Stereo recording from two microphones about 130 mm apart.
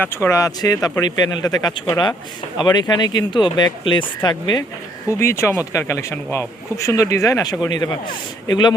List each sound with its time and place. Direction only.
0.0 s speech: 20° left (ahead or behind)
5.0 s speech: 20° left (ahead or behind)